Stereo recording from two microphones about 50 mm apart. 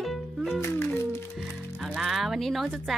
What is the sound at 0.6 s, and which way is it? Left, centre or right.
Music, left.